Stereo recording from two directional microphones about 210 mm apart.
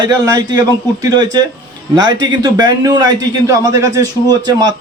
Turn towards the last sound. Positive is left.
turn(degrees=-15)  # may be behind; listen again after turning